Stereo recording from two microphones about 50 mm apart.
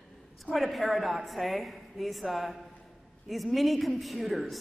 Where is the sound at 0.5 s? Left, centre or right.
Centre.